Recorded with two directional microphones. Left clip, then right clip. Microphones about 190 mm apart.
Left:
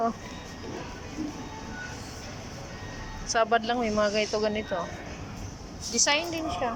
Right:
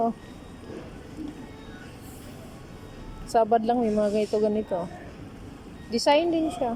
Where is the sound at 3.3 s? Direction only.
40° right (ahead or behind).